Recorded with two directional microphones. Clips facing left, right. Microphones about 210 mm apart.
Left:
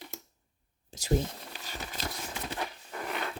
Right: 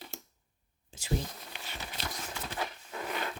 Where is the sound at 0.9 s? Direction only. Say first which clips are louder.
Left 6 dB; 40° left (ahead or behind).